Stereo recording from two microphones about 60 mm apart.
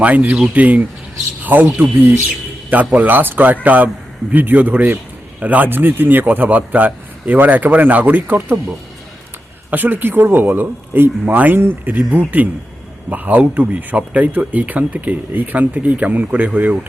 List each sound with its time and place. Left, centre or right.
0.0 s speech: right
9.6 s speech: right